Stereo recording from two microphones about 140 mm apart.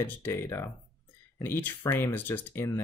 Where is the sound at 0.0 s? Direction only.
15° left (ahead or behind).